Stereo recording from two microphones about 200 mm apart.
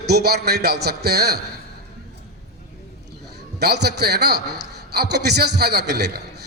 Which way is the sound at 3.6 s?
55° right (ahead or behind).